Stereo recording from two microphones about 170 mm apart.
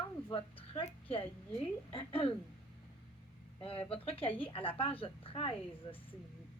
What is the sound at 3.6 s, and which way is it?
A woman's voice, 30° left (ahead or behind).